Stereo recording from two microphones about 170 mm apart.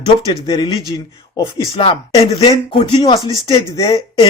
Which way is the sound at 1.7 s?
30° left (ahead or behind).